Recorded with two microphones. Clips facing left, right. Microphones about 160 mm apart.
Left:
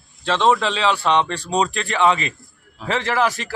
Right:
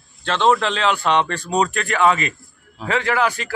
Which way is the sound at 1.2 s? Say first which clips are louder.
Right 1 dB; 30° left (ahead or behind).